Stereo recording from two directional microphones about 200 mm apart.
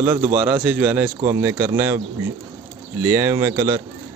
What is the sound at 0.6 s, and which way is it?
Speech, 5° right (ahead or behind).